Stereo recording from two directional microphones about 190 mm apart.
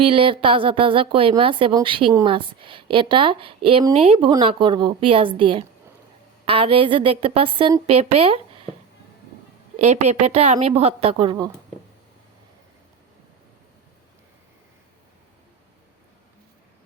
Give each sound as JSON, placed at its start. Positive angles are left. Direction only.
{"t": 0.0, "sound": "speech", "side_deg": -30}
{"t": 9.7, "sound": "speech", "side_deg": -35}